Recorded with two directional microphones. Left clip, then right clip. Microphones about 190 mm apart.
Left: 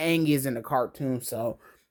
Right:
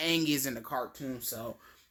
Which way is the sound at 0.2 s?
30° left (ahead or behind).